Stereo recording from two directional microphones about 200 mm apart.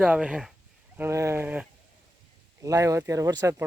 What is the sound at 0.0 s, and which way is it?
Speech, 5° right (ahead or behind).